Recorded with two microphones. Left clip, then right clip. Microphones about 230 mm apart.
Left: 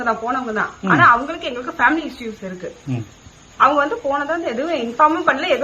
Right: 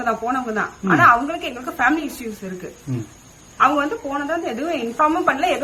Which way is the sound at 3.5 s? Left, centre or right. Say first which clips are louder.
Left 2 dB; centre.